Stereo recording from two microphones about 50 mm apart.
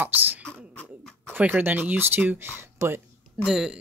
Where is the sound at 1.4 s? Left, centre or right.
Right.